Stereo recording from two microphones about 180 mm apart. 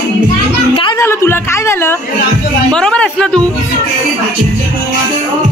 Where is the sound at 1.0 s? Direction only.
15° left (ahead or behind).